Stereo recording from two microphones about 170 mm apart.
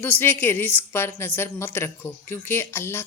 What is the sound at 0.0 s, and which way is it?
A woman's voice, 10° left (ahead or behind).